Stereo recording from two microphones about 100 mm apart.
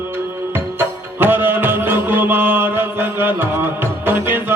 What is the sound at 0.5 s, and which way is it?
Music, 20° right (ahead or behind).